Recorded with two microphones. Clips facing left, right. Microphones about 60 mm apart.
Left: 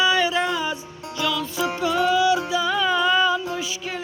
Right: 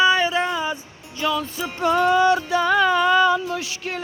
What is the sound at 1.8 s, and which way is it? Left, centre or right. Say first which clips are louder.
Music: right 3 dB; right.